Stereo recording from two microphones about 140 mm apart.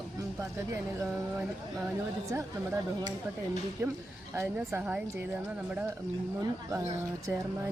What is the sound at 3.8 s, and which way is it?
Speech, 20° right (ahead or behind).